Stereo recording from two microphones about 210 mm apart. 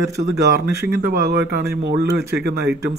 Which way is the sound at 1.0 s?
50° right (ahead or behind).